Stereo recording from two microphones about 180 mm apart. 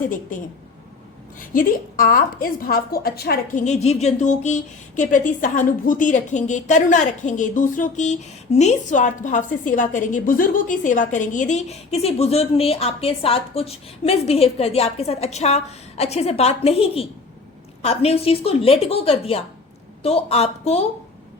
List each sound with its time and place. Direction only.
1.4 s a woman's voice: 50° left (ahead or behind)
3.6 s speech: 40° left (ahead or behind)